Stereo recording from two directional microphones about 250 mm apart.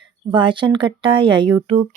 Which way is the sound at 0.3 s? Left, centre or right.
Centre.